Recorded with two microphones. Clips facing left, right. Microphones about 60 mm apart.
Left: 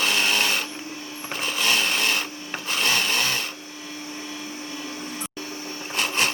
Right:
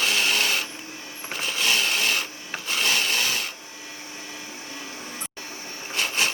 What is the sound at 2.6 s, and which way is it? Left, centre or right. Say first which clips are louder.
Chainsaw: left 1 dB; left.